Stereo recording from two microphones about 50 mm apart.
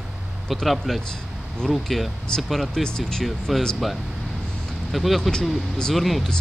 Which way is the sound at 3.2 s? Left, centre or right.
Centre.